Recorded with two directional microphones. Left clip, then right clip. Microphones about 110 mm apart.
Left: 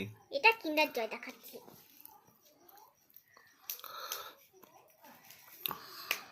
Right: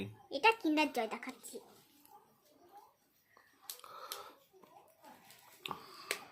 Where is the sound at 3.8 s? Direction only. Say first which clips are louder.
Left 4 dB; centre (ahead or behind).